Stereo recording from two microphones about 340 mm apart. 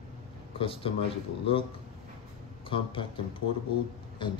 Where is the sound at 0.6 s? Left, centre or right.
Centre.